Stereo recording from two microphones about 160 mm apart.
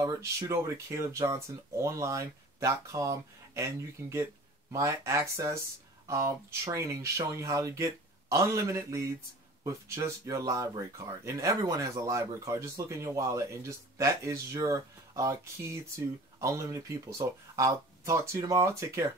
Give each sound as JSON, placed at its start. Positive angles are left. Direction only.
{"t": 0.0, "sound": "speech", "side_deg": -20}